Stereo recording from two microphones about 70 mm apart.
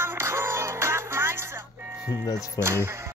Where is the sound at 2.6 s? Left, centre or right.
Left.